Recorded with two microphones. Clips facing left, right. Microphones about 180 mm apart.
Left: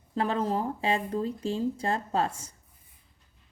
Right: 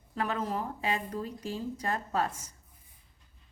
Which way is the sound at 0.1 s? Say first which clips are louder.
Left 5 dB; 30° left (ahead or behind).